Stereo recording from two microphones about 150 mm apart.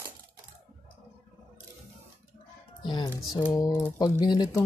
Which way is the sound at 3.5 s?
25° left (ahead or behind).